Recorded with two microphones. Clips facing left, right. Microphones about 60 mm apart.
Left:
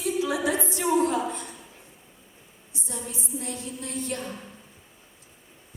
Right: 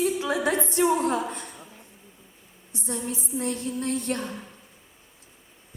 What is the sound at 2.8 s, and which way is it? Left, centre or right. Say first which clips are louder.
A woman's voice: right 5 dB; right.